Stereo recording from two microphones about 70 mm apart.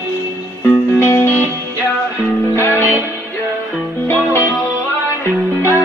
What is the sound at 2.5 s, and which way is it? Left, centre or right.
Music, left.